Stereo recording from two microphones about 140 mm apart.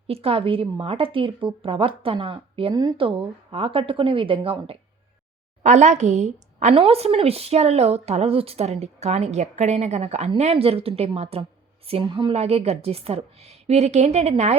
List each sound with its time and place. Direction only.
0.1 s a woman's voice: 40° right (ahead or behind)
5.6 s a woman's voice: 55° right (ahead or behind)